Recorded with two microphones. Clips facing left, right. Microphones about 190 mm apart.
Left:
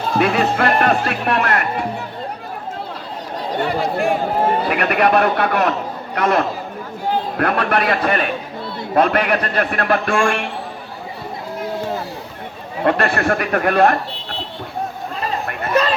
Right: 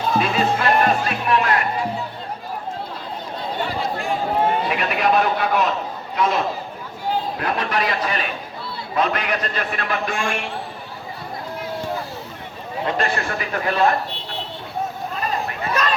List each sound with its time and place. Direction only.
0.2 s speech: 65° left (ahead or behind)
3.6 s a sound: 60° left (ahead or behind)
4.7 s speech: 60° left (ahead or behind)
12.8 s speech: 60° left (ahead or behind)